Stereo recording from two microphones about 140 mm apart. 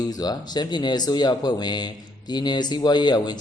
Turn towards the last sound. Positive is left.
turn(degrees=30)  # may be behind; listen again after turning